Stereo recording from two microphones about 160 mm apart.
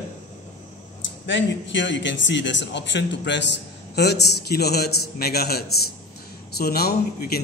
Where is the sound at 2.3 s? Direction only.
90° left.